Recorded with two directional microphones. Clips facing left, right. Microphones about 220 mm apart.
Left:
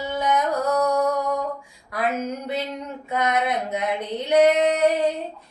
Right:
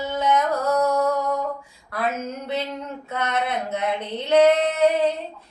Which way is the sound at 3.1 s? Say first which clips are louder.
Left 3 dB; 15° left (ahead or behind).